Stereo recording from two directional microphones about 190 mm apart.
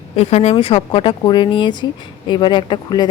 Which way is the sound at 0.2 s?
35° left (ahead or behind).